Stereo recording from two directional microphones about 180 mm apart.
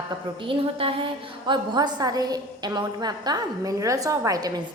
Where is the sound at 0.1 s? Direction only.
30° right (ahead or behind).